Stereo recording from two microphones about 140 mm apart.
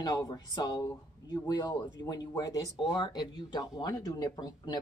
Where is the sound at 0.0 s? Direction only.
25° left (ahead or behind).